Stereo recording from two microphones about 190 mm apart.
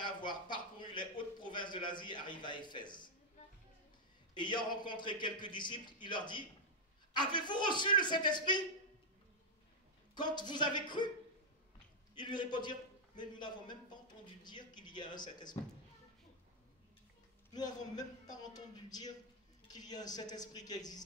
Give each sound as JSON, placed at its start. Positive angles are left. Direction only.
{"t": 0.0, "sound": "a sound", "side_deg": 25}
{"t": 4.3, "sound": "a man's voice", "side_deg": 25}
{"t": 10.1, "sound": "a man's voice", "side_deg": 25}
{"t": 12.2, "sound": "a man's voice", "side_deg": 25}
{"t": 17.5, "sound": "a man's voice", "side_deg": 20}